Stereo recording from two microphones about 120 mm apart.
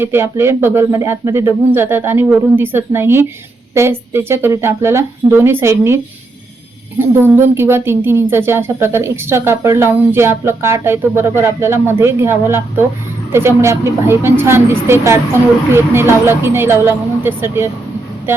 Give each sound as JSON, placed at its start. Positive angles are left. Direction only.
{"t": 0.0, "sound": "speech", "side_deg": -20}
{"t": 7.0, "sound": "speech", "side_deg": -20}